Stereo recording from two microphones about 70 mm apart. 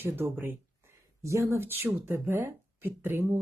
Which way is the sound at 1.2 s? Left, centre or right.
Right.